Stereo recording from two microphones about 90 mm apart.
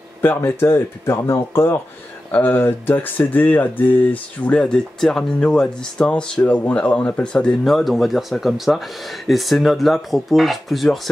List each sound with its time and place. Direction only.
0.2 s speech: 25° left (ahead or behind); by 11.0 s centre (ahead or behind)